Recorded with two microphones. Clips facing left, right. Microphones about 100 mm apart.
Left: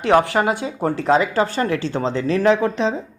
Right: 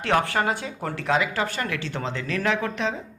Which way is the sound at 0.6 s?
35° left (ahead or behind).